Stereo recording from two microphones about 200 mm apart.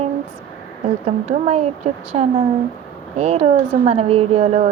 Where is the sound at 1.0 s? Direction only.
30° right (ahead or behind).